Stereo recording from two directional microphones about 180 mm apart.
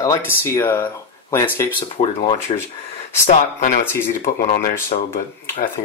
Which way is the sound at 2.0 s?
40° left (ahead or behind).